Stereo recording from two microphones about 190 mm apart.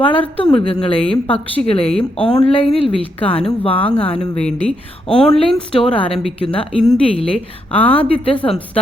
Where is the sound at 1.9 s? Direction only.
5° left (ahead or behind).